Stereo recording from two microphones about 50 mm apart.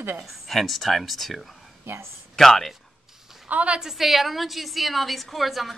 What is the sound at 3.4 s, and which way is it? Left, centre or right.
Speech, right.